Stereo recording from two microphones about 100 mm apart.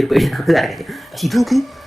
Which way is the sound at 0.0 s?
Centre (ahead or behind).